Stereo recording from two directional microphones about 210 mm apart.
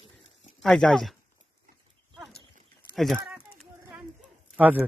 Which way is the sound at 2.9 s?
Centre (ahead or behind).